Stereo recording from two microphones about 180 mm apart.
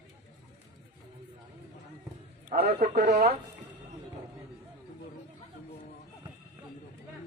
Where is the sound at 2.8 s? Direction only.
55° right (ahead or behind).